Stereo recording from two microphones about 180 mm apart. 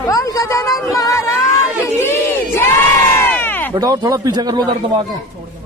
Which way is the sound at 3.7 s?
20° right (ahead or behind).